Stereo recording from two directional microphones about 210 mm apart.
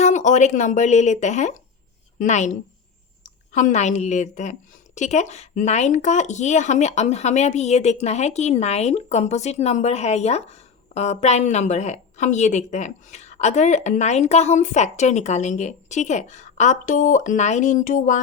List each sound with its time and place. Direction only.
0.0 s a woman's voice: 35° left (ahead or behind)